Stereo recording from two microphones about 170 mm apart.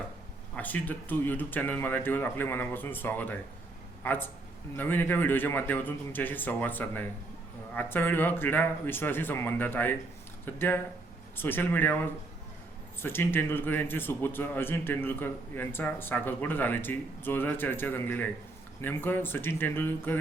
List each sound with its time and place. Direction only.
0.5 s a man's voice: 10° left (ahead or behind)
13.0 s a man's voice: 15° left (ahead or behind)